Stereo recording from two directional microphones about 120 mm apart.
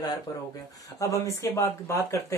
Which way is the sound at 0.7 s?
30° left (ahead or behind).